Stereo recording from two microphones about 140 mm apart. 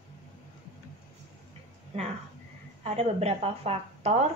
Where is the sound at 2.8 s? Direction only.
50° right (ahead or behind).